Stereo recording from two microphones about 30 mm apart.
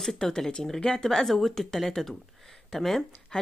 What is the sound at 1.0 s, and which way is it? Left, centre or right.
Speech, centre.